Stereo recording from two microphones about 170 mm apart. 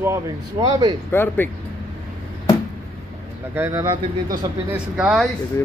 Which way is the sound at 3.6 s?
15° right (ahead or behind).